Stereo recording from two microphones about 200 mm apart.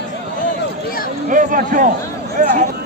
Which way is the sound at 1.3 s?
40° right (ahead or behind).